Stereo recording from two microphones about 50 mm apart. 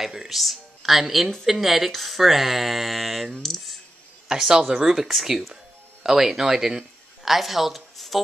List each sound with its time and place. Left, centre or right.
0.0 s a woman's voice: centre
4.3 s speech: centre